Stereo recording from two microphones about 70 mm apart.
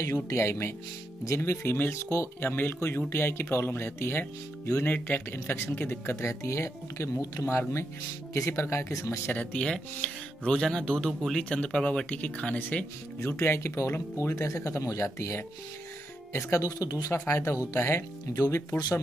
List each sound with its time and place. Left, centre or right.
0.4 s speech: left
2.5 s speech: left
9.3 s speech: left
9.7 s speech: centre; by 16.6 s left
16.6 s speech: left
17.3 s speech: left